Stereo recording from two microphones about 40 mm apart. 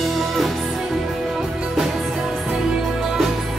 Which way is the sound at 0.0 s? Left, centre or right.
Centre.